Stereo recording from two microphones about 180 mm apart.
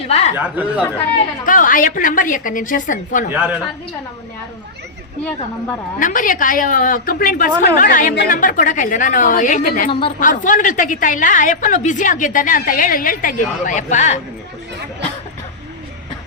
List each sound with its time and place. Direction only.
0.1 s speech: 35° left (ahead or behind)
0.3 s speech: 10° right (ahead or behind)
1.5 s a woman's voice: 50° left (ahead or behind)
3.3 s speech: 10° right (ahead or behind)
6.0 s a woman's voice: 45° left (ahead or behind)